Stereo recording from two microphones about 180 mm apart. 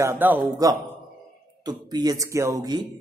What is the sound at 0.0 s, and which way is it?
A man's voice, 15° right (ahead or behind).